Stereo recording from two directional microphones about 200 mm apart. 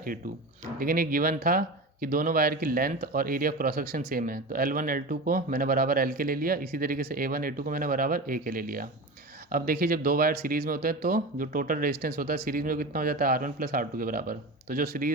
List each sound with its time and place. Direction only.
0.8 s speech: 45° right (ahead or behind)